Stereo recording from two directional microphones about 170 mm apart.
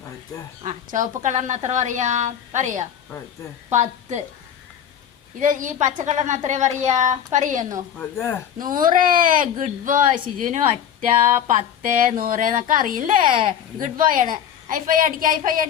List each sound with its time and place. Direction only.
0.6 s a woman's voice: 45° right (ahead or behind)
5.4 s speech: 50° right (ahead or behind)
7.9 s speech: 10° left (ahead or behind)
8.5 s speech: 55° right (ahead or behind)
10.4 s a woman's voice: 40° right (ahead or behind); by 15.4 s 55° right (ahead or behind)